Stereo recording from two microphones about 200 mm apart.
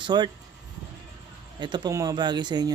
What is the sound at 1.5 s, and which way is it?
Speech, 20° right (ahead or behind).